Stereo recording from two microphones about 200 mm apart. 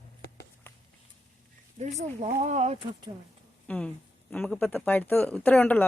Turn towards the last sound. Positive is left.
turn(degrees=10)  # may be behind; listen again after turning